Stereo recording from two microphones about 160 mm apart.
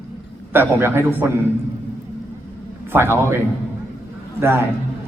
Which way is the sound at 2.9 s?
15° right (ahead or behind).